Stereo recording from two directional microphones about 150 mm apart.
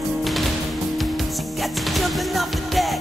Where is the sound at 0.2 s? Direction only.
Centre (ahead or behind).